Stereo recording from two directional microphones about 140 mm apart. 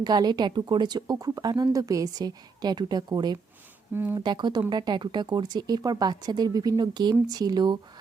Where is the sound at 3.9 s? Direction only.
15° right (ahead or behind).